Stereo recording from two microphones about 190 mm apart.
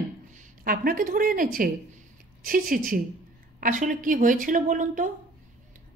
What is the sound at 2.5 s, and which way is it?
A woman's voice, 50° right (ahead or behind).